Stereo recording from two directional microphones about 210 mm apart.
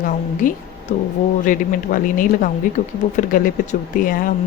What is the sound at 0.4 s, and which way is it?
Speech, 40° left (ahead or behind).